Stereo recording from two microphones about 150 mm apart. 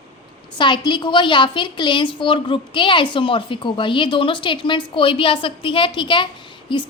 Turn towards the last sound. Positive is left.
turn(degrees=35)  # may be behind; listen again after turning